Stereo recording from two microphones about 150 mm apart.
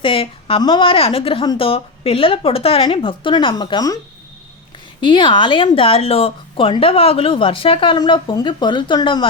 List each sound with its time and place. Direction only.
0.0 s speech: 35° left (ahead or behind)
4.9 s speech: 30° left (ahead or behind)